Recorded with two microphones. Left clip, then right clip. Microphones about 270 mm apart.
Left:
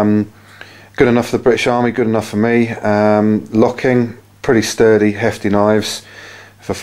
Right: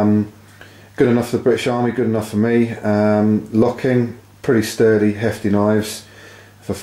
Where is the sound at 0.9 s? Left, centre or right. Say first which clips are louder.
Left 3 dB; centre.